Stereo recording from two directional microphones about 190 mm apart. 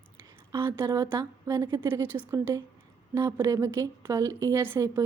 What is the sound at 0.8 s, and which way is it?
A woman's voice, 20° right (ahead or behind).